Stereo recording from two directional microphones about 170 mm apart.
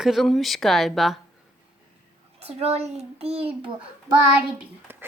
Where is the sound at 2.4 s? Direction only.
35° right (ahead or behind).